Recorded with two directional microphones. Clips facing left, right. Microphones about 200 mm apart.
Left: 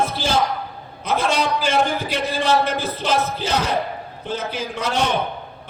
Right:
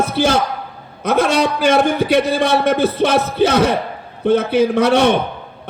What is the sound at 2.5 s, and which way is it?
A man's voice, 65° right (ahead or behind).